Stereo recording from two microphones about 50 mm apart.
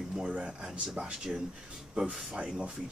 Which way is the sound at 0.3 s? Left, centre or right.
Right.